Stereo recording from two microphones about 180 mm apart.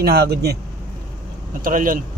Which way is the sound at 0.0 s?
60° right (ahead or behind).